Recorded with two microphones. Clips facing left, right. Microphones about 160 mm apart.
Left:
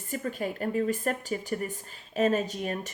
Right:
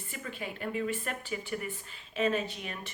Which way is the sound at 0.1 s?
40° left (ahead or behind).